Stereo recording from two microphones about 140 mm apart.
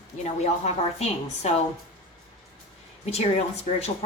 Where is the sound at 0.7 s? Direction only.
50° left (ahead or behind).